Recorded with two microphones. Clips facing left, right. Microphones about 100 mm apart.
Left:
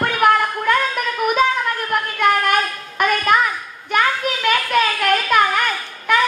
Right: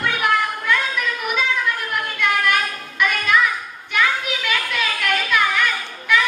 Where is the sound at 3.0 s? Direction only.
45° left (ahead or behind).